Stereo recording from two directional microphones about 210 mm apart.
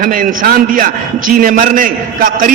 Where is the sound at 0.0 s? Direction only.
40° right (ahead or behind).